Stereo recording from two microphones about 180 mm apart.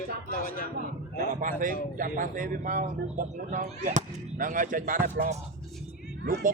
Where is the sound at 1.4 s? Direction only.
45° right (ahead or behind).